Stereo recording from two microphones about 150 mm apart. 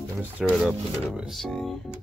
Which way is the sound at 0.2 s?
10° right (ahead or behind).